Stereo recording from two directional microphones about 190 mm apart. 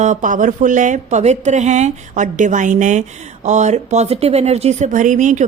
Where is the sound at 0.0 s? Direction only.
40° right (ahead or behind).